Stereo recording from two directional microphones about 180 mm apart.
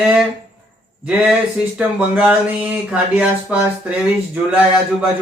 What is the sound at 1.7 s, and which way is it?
Speech, 5° right (ahead or behind).